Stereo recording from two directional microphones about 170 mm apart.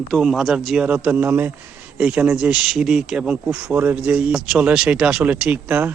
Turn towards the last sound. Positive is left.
turn(degrees=-10)  # may be behind; listen again after turning